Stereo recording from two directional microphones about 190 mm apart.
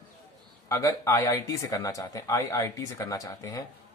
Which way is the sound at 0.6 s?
15° left (ahead or behind).